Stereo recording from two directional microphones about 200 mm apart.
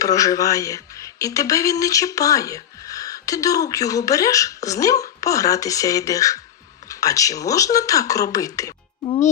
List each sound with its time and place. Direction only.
0.0 s speech: 15° left (ahead or behind)